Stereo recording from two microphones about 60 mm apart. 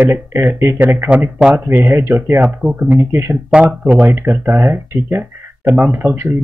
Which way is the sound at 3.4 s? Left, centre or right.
Centre.